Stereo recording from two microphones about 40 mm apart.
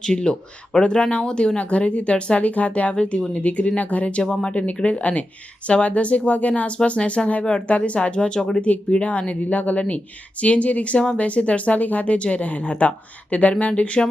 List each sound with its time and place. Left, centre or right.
0.0 s a woman's voice: left
4.2 s speech: centre
4.8 s a woman's voice: left
8.9 s a woman's voice: left